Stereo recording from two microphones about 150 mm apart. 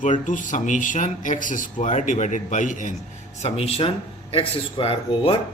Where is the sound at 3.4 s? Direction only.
40° left (ahead or behind).